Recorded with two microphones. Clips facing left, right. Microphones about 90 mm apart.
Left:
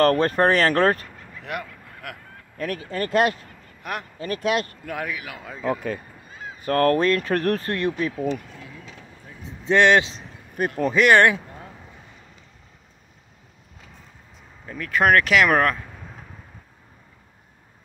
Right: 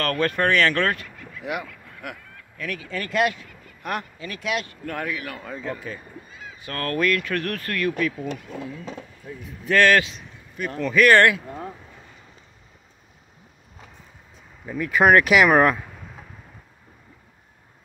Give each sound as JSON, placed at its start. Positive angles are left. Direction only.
{"t": 0.0, "sound": "speech", "side_deg": 35}
{"t": 1.4, "sound": "a man's voice", "side_deg": -5}
{"t": 2.5, "sound": "speech", "side_deg": 40}
{"t": 3.8, "sound": "a man's voice", "side_deg": 0}
{"t": 4.2, "sound": "speech", "side_deg": 45}
{"t": 4.8, "sound": "a man's voice", "side_deg": 5}
{"t": 5.8, "sound": "speech", "side_deg": 50}
{"t": 9.4, "sound": "speech", "side_deg": 25}
{"t": 10.6, "sound": "speech", "side_deg": 45}
{"t": 11.0, "sound": "speech", "side_deg": 20}
{"t": 14.7, "sound": "speech", "side_deg": -10}